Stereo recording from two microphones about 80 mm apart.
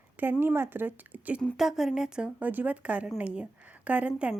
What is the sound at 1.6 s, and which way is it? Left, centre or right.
A woman's voice, centre.